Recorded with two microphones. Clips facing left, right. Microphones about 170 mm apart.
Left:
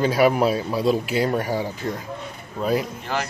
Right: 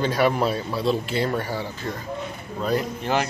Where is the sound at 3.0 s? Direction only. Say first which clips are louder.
Right 4 dB; 20° right (ahead or behind).